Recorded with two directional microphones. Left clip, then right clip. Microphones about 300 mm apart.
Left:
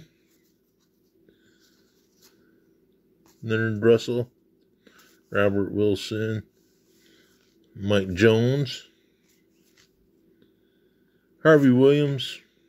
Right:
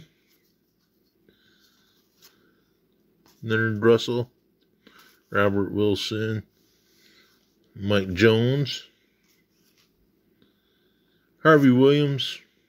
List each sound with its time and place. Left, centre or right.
3.3 s speech: centre
7.7 s speech: centre
11.3 s speech: centre